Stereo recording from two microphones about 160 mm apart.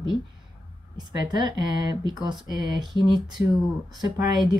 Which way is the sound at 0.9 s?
25° right (ahead or behind).